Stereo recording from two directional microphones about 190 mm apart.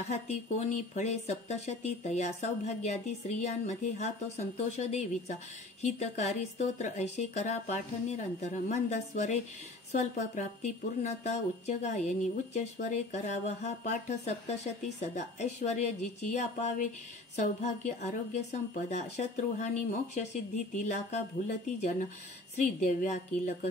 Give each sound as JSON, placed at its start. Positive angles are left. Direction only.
{"t": 0.1, "sound": "speech", "side_deg": 35}